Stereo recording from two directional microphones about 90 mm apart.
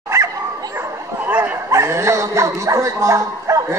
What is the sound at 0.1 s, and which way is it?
Dog, 30° right (ahead or behind).